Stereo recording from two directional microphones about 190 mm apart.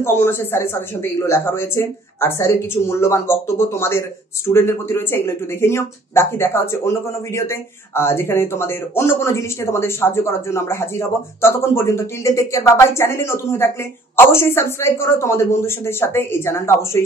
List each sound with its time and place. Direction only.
0.0 s speech: 10° left (ahead or behind)